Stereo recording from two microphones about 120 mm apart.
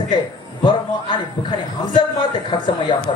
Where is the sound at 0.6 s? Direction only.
40° left (ahead or behind).